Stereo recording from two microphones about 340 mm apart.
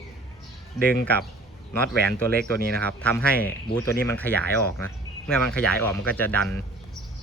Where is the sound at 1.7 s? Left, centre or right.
Centre.